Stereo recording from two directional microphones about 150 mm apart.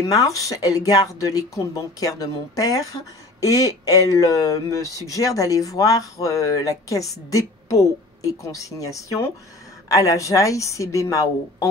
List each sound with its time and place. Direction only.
0.0 s speech: 25° left (ahead or behind)